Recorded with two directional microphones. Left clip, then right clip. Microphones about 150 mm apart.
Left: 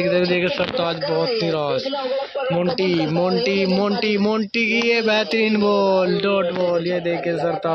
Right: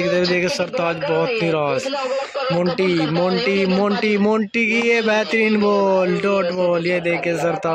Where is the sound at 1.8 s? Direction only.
20° left (ahead or behind).